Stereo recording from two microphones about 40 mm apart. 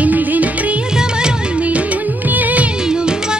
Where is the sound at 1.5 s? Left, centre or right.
Right.